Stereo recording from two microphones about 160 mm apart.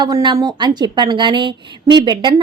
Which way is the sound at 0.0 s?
25° right (ahead or behind).